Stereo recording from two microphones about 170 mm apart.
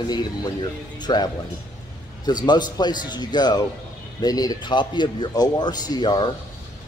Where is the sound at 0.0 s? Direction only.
25° left (ahead or behind).